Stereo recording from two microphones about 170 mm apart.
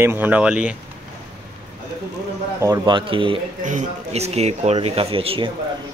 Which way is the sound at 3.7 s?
40° right (ahead or behind).